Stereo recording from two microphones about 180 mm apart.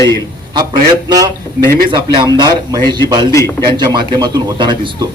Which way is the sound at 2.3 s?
25° right (ahead or behind).